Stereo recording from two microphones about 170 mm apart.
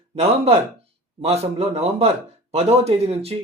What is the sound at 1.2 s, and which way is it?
A man's voice, 35° right (ahead or behind).